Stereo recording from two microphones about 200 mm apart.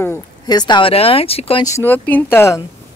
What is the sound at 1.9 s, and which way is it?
Speech, 10° left (ahead or behind).